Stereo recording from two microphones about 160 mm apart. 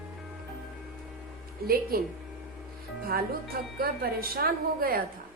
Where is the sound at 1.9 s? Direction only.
70° right (ahead or behind).